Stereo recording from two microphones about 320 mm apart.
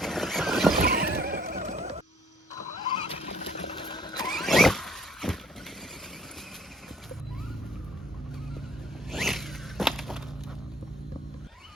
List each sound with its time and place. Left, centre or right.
0.0 s horse: centre
0.9 s neigh: right
3.1 s vehicle: centre
4.3 s squeal: centre
9.1 s a sound: centre